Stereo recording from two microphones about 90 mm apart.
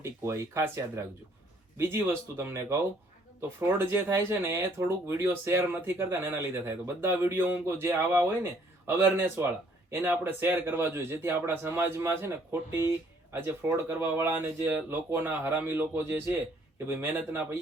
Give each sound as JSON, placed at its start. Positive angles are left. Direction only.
{"t": 0.0, "sound": "speech", "side_deg": -30}